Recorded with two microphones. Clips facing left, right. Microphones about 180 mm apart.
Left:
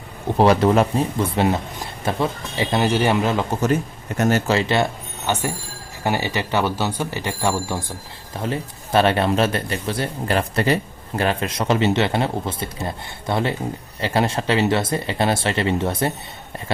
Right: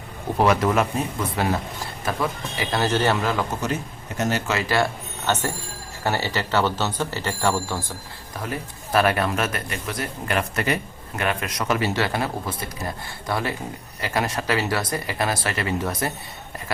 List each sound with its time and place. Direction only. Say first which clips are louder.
0.3 s speech: left 4 dB; 30° left (ahead or behind)
2.8 s speech: left 2 dB; 15° left (ahead or behind)
4.2 s speech: left 5 dB; 50° left (ahead or behind)
4.4 s speech: left 3 dB; 25° left (ahead or behind)
8.4 s speech: left 5 dB; 25° left (ahead or behind)